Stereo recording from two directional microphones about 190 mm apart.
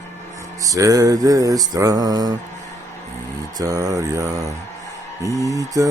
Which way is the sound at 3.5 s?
20° right (ahead or behind).